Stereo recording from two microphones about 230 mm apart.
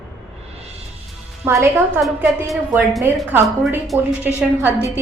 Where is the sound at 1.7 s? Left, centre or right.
Centre.